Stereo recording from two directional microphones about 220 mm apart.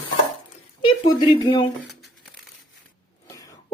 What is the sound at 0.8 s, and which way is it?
Speech, 20° left (ahead or behind).